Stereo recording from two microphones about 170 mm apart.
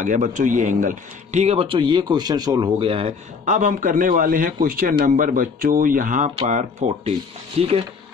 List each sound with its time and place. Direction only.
0.0 s a man's voice: 50° right (ahead or behind); by 3.2 s 30° right (ahead or behind)
3.4 s a man's voice: 50° right (ahead or behind)